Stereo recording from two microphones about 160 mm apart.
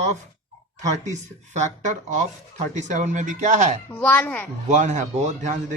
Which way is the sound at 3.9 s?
10° left (ahead or behind).